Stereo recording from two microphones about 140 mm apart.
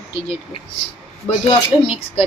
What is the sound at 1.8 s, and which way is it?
Speech, 40° left (ahead or behind).